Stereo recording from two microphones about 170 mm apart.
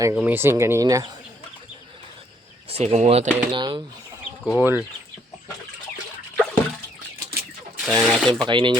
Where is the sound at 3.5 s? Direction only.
25° right (ahead or behind).